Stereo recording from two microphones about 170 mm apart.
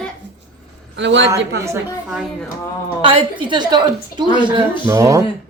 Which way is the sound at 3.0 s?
30° right (ahead or behind).